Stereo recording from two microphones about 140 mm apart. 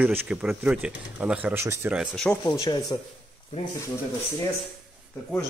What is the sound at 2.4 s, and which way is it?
Speech, 25° left (ahead or behind).